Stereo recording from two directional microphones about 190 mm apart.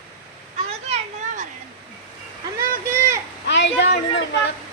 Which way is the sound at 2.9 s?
15° right (ahead or behind).